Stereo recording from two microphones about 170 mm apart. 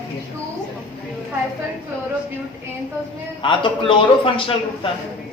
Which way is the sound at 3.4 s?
30° left (ahead or behind).